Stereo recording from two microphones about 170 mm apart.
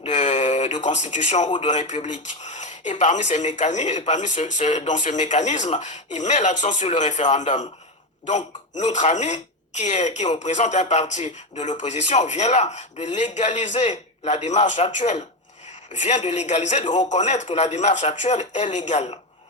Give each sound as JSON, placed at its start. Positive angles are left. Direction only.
{"t": 0.0, "sound": "a sound", "side_deg": 45}
{"t": 1.9, "sound": "speech", "side_deg": 30}
{"t": 2.4, "sound": "speech", "side_deg": 45}